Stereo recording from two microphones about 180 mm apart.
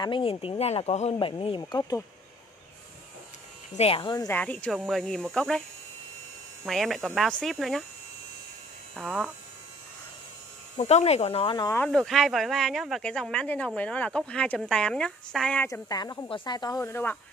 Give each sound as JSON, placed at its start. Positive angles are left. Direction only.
{"t": 0.0, "sound": "speech", "side_deg": 30}
{"t": 3.7, "sound": "speech", "side_deg": 30}
{"t": 4.3, "sound": "speech", "side_deg": 10}
{"t": 6.6, "sound": "speech", "side_deg": 0}
{"t": 8.9, "sound": "speech", "side_deg": -5}
{"t": 10.8, "sound": "speech", "side_deg": 40}
{"t": 11.7, "sound": "speech", "side_deg": 5}
{"t": 15.6, "sound": "speech", "side_deg": 20}